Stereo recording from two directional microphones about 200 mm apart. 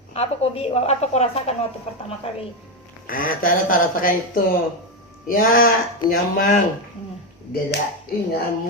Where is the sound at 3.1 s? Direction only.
45° left (ahead or behind).